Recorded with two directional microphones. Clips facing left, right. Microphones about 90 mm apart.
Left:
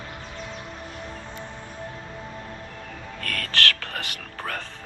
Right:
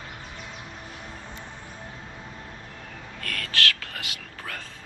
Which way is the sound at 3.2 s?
50° left (ahead or behind).